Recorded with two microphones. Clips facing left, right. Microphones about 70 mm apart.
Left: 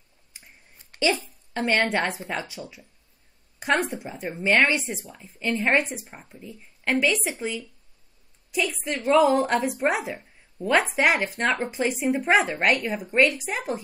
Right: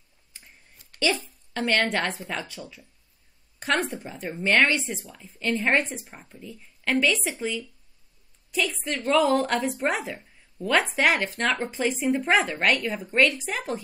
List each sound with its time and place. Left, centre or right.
1.5 s a woman's voice: centre